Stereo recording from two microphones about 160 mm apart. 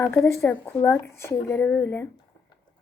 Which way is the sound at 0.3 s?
20° left (ahead or behind).